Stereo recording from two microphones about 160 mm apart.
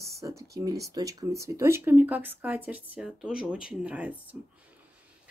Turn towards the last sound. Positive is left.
turn(degrees=-10)  # may be behind; listen again after turning